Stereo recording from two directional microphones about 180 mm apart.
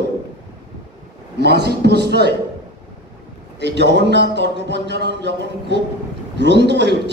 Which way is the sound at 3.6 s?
70° right (ahead or behind).